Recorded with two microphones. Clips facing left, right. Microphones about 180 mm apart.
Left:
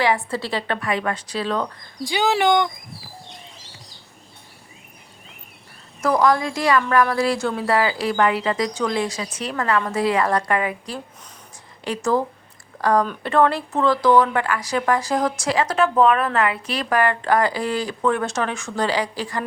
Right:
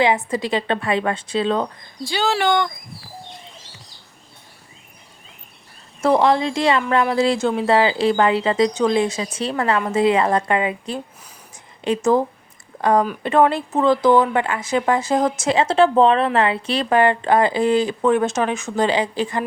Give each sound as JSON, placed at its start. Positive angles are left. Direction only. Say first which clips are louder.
{"t": 0.0, "sound": "speech", "louder": "right 3 dB", "side_deg": -20}
{"t": 2.0, "sound": "speech", "louder": "left 1 dB", "side_deg": 15}
{"t": 6.0, "sound": "speech", "louder": "right 2 dB", "side_deg": -25}